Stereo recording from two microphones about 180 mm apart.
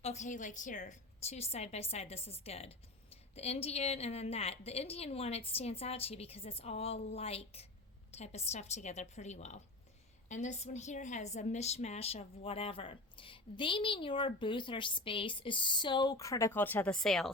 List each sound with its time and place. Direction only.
0.0 s a woman's voice: 40° left (ahead or behind); by 17.2 s 5° left (ahead or behind)